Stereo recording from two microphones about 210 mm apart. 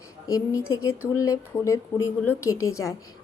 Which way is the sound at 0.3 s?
15° left (ahead or behind).